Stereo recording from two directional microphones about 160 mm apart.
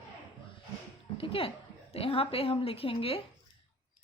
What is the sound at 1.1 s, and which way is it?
A woman's voice, 35° left (ahead or behind).